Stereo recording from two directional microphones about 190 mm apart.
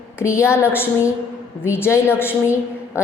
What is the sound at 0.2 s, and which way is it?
A woman's voice, 15° left (ahead or behind).